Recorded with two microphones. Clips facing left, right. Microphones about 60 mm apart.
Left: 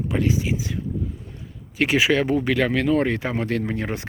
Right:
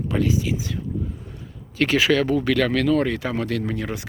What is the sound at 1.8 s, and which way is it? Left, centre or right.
Speech, centre.